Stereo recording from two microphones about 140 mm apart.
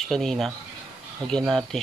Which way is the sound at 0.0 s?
Centre (ahead or behind).